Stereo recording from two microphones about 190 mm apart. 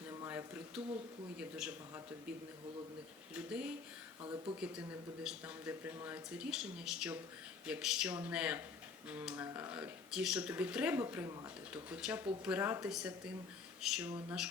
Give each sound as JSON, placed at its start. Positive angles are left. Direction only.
{"t": 0.1, "sound": "a sound", "side_deg": -15}
{"t": 1.4, "sound": "speech", "side_deg": -5}
{"t": 3.3, "sound": "speech", "side_deg": -5}
{"t": 4.2, "sound": "speech", "side_deg": -25}
{"t": 4.6, "sound": "speech", "side_deg": -5}